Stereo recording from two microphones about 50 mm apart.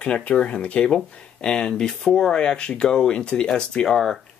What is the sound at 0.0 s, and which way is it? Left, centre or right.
Speech, left.